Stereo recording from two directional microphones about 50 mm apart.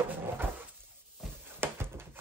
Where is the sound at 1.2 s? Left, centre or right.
Centre.